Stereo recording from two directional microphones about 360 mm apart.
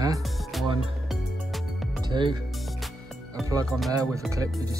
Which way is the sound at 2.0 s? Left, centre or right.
Centre.